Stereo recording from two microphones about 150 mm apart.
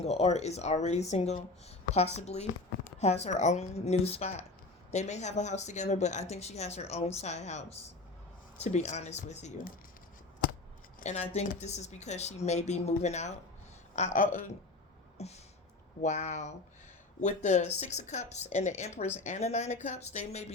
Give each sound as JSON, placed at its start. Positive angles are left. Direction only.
{"t": 0.0, "sound": "a woman's voice", "side_deg": 45}
{"t": 11.0, "sound": "a woman's voice", "side_deg": 45}
{"t": 15.2, "sound": "a woman's voice", "side_deg": 45}